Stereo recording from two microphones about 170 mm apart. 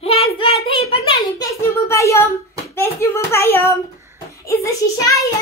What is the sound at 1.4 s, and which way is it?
A child's voice, 15° left (ahead or behind).